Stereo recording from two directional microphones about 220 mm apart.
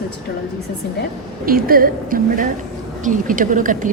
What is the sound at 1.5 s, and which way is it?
A woman's voice, 40° right (ahead or behind).